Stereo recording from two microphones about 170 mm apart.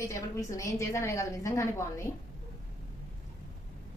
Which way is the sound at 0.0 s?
20° left (ahead or behind).